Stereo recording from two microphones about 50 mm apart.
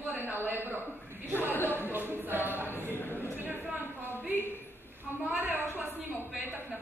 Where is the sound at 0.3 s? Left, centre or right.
Right.